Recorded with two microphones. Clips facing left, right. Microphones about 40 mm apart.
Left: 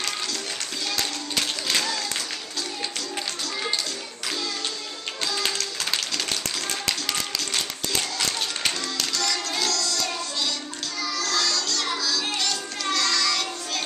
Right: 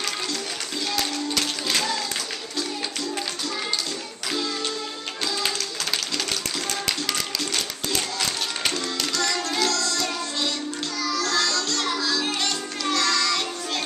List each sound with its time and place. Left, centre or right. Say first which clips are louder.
1.3 s music: left 2 dB; centre
5.2 s a sound: even; centre
7.1 s music: right 1 dB; centre
8.9 s music: right 2 dB; centre
11.3 s music: right 2 dB; right
12.9 s music: right 1 dB; centre